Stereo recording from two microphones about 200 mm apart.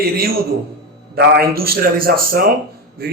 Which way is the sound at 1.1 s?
50° right (ahead or behind).